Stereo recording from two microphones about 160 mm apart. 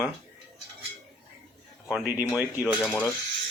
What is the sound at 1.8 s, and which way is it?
Speech, 10° right (ahead or behind).